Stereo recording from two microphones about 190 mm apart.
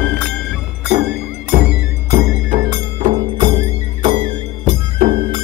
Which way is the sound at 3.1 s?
25° right (ahead or behind).